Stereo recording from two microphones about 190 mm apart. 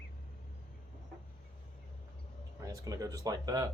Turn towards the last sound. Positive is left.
turn(degrees=-20)  # may be behind; listen again after turning